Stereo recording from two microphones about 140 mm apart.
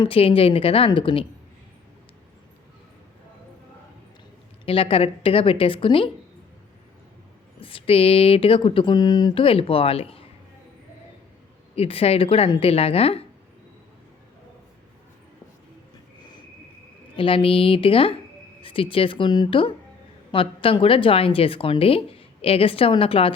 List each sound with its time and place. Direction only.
0.0 s a woman's voice: 40° left (ahead or behind)
4.6 s a woman's voice: 40° left (ahead or behind)
7.6 s a woman's voice: 40° left (ahead or behind)
11.7 s speech: 45° left (ahead or behind)
17.2 s a woman's voice: 40° left (ahead or behind)